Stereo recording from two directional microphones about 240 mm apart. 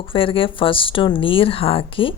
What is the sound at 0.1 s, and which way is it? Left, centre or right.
Speech, left.